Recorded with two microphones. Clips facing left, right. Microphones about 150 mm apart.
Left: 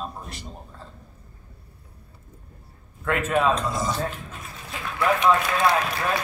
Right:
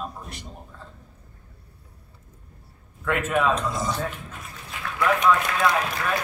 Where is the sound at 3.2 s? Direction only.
30° left (ahead or behind).